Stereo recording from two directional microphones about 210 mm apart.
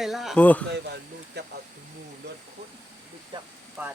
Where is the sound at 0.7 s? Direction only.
55° right (ahead or behind).